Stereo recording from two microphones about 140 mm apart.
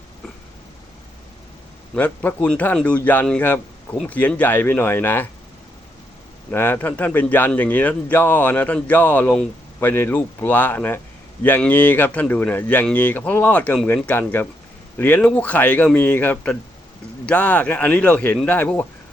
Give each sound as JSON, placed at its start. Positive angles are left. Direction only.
{"t": 2.0, "sound": "speech", "side_deg": 10}
{"t": 6.5, "sound": "speech", "side_deg": 15}